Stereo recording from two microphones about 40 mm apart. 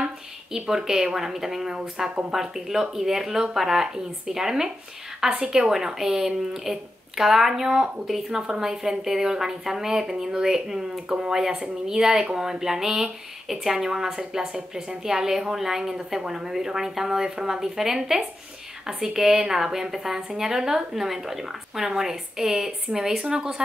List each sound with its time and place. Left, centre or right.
0.0 s a woman's voice: centre
2.0 s speech: right
2.3 s a woman's voice: centre